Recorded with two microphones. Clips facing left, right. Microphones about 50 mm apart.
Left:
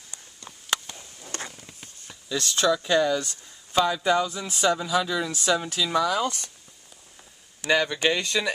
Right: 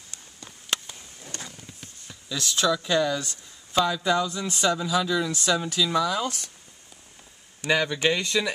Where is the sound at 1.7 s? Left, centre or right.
Centre.